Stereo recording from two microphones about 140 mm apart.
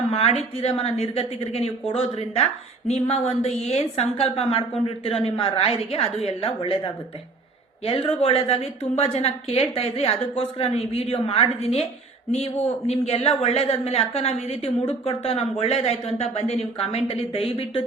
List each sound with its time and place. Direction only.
0.1 s a woman's voice: 45° left (ahead or behind)
7.9 s a woman's voice: 45° left (ahead or behind)
12.9 s a woman's voice: 45° left (ahead or behind)